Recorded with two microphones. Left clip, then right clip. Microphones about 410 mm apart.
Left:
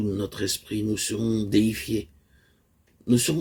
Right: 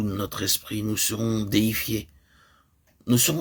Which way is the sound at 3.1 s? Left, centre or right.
Right.